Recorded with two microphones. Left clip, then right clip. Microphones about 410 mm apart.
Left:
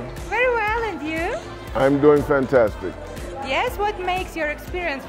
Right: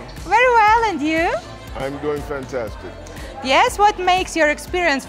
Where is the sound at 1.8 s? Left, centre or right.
Left.